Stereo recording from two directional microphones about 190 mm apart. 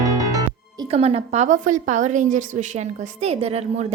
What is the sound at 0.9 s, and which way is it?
A woman's voice, 30° right (ahead or behind).